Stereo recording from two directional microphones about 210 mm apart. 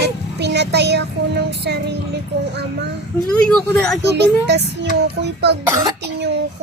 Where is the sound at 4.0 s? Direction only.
55° right (ahead or behind).